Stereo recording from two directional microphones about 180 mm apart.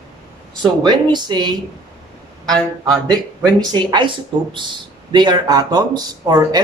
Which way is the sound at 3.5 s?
25° right (ahead or behind).